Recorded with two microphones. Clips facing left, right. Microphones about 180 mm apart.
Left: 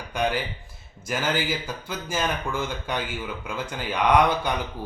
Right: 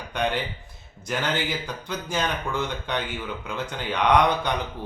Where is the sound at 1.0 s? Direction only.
5° left (ahead or behind).